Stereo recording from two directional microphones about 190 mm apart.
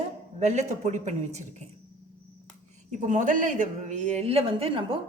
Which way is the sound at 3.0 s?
40° right (ahead or behind).